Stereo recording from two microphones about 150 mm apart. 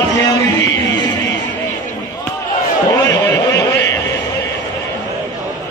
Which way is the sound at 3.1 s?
20° left (ahead or behind).